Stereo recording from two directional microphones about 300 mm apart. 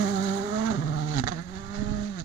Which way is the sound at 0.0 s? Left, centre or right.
Centre.